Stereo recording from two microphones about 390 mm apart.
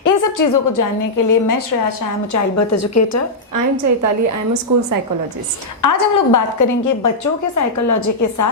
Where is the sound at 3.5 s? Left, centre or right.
Right.